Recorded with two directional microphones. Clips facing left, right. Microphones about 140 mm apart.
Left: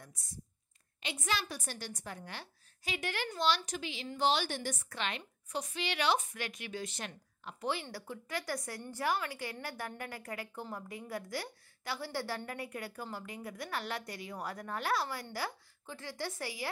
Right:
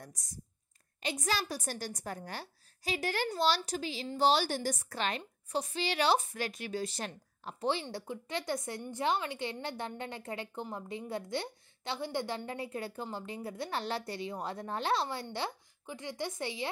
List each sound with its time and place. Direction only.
0.0 s a woman's voice: 40° right (ahead or behind); by 16.6 s 25° right (ahead or behind)